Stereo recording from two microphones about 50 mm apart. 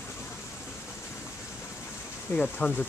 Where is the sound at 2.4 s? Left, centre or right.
Left.